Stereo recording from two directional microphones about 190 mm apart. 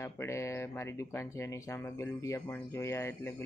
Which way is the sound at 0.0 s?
15° left (ahead or behind).